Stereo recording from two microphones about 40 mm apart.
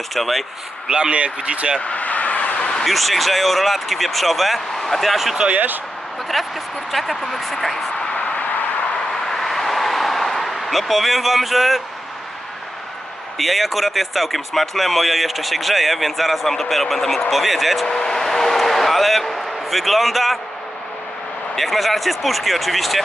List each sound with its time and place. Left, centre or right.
0.1 s speech: centre
0.9 s speech: right
1.8 s vehicle: left
2.8 s speech: centre
5.5 s speech: right
6.3 s speech: centre
9.2 s vehicle: centre
13.4 s speech: centre
17.8 s speech: centre
21.5 s speech: centre